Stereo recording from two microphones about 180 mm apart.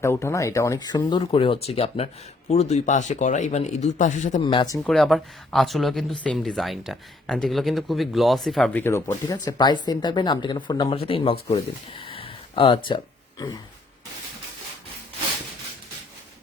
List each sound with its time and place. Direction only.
0.0 s speech: 15° left (ahead or behind); by 4.4 s 45° left (ahead or behind)
4.4 s speech: 25° left (ahead or behind)
4.8 s speech: centre (ahead or behind); by 13.0 s 25° left (ahead or behind)